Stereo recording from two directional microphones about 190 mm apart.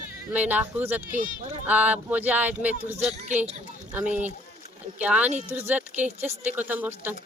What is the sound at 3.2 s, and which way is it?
Speech, 40° right (ahead or behind).